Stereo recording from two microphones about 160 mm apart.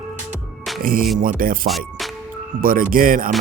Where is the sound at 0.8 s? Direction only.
65° right (ahead or behind).